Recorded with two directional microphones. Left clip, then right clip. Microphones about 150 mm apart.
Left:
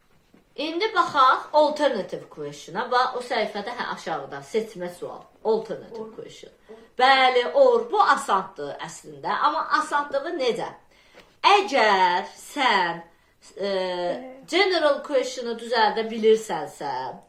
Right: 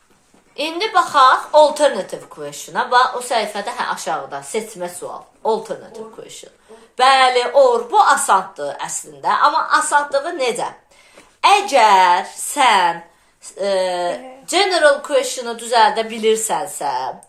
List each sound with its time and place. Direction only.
0.5 s a woman's voice: 35° left (ahead or behind)
6.9 s a woman's voice: 35° left (ahead or behind)